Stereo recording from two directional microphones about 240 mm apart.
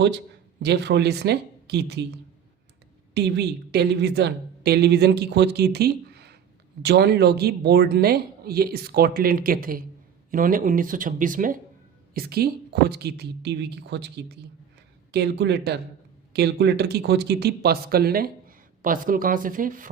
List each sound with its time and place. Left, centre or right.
0.6 s a woman's voice: right
3.2 s a woman's voice: right